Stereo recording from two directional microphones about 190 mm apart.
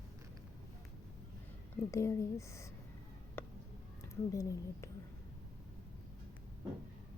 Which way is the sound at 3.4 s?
10° left (ahead or behind).